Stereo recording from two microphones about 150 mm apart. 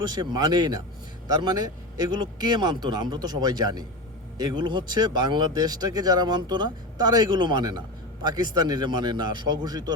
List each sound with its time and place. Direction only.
0.0 s speech: 30° right (ahead or behind)